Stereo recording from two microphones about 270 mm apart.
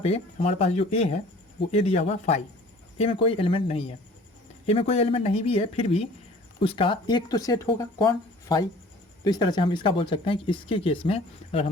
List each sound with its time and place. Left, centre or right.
0.0 s speech: left